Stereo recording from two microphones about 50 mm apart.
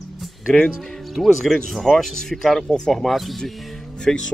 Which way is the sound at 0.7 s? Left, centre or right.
Centre.